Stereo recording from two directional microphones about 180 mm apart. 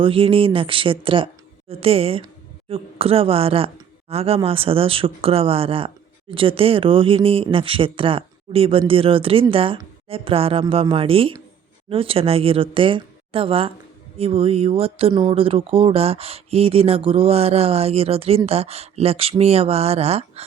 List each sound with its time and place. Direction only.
0.0 s speech: 30° right (ahead or behind)